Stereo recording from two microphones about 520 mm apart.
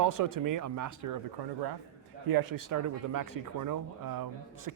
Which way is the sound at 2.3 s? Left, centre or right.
Right.